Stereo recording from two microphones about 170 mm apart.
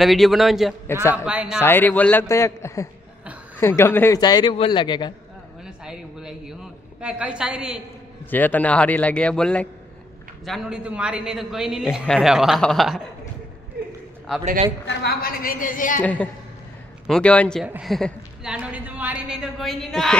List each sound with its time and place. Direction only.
0.0 s a man's voice: centre (ahead or behind)
1.6 s a man's voice: 10° left (ahead or behind)
4.2 s a man's voice: 25° left (ahead or behind)
5.6 s a woman's voice: 5° right (ahead or behind)
8.3 s a man's voice: 10° left (ahead or behind)
14.3 s a man's voice: centre (ahead or behind)
14.9 s a woman's voice: 80° left; by 16.0 s 50° left (ahead or behind)
16.0 s a man's voice: 10° left (ahead or behind)